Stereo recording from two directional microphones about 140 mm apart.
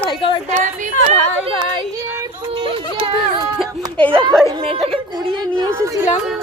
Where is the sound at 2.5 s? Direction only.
35° right (ahead or behind).